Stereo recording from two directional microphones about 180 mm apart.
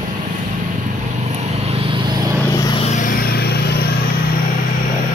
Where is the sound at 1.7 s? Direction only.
30° right (ahead or behind).